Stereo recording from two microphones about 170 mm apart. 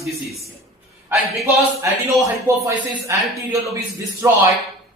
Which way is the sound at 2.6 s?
10° right (ahead or behind).